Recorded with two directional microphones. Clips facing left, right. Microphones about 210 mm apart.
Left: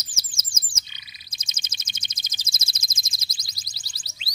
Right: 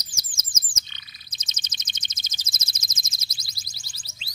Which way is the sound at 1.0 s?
50° right (ahead or behind).